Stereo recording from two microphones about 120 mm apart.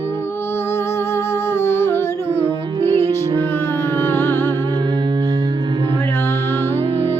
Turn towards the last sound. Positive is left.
turn(degrees=-50)  # may be behind; listen again after turning